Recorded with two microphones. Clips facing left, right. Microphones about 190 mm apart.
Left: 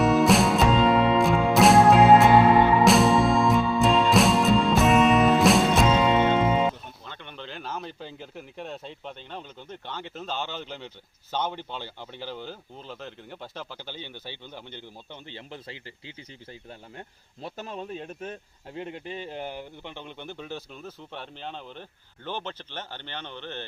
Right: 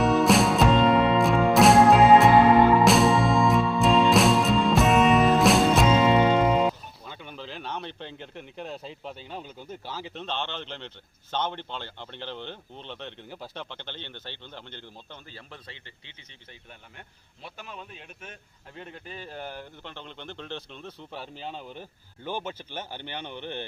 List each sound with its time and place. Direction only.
0.0 s music: centre (ahead or behind)
15.3 s speech: 25° left (ahead or behind)
17.0 s a man's voice: 35° left (ahead or behind)
18.7 s speech: 20° left (ahead or behind); by 23.6 s 15° right (ahead or behind)